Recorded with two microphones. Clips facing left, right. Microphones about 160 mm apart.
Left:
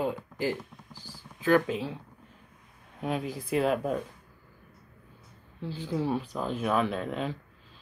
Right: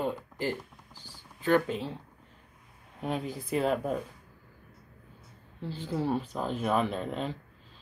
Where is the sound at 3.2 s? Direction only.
10° left (ahead or behind).